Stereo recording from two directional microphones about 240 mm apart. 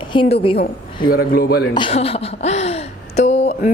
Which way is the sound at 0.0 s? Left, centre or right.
Left.